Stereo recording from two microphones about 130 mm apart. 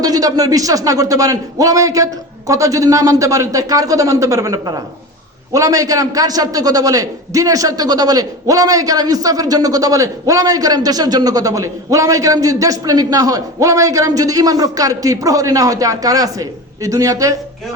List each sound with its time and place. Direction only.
0.0 s a man's voice: 30° right (ahead or behind)